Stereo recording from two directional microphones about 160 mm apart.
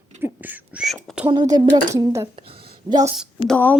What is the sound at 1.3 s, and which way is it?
Speech, 20° right (ahead or behind).